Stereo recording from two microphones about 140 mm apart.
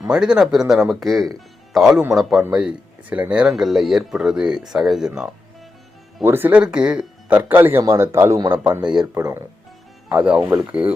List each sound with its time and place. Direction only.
0.1 s speech: 5° right (ahead or behind)
6.2 s speech: 15° right (ahead or behind)
8.8 s speech: 5° right (ahead or behind)